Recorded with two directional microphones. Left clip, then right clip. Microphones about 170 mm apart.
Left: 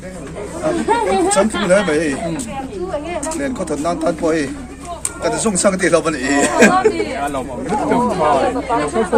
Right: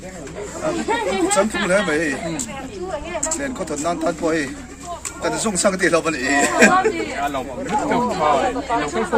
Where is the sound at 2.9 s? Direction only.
60° left (ahead or behind).